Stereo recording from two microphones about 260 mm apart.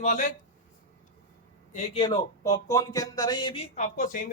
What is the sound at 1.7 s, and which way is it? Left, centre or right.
Speech, left.